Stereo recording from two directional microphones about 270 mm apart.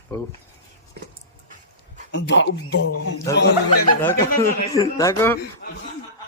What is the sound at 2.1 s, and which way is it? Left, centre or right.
Speech, left.